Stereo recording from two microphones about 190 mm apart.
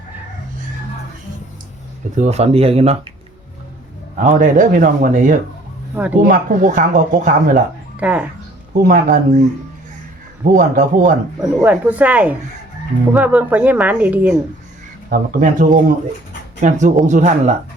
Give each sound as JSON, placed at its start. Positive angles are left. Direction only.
{"t": 2.1, "sound": "speech", "side_deg": -35}
{"t": 4.2, "sound": "speech", "side_deg": -40}
{"t": 5.9, "sound": "speech", "side_deg": -10}
{"t": 6.1, "sound": "speech", "side_deg": -45}
{"t": 7.9, "sound": "speech", "side_deg": -5}
{"t": 8.7, "sound": "speech", "side_deg": -50}
{"t": 10.4, "sound": "speech", "side_deg": -45}
{"t": 11.6, "sound": "speech", "side_deg": -5}
{"t": 15.1, "sound": "speech", "side_deg": -45}